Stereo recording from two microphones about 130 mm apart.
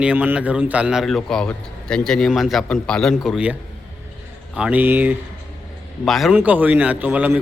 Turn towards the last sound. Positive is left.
turn(degrees=-15)  # may be behind; listen again after turning